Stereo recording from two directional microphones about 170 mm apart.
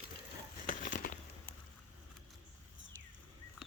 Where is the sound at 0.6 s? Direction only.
50° left (ahead or behind).